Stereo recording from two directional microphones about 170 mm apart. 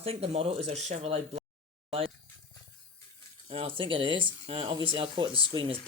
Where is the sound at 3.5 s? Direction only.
35° right (ahead or behind).